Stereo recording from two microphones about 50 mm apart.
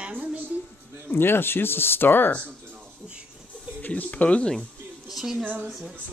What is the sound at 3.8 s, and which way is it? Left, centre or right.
Speech, left.